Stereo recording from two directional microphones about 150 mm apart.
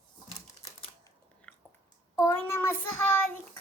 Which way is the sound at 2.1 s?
20° left (ahead or behind).